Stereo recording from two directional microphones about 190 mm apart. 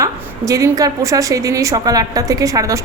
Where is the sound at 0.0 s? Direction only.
15° right (ahead or behind).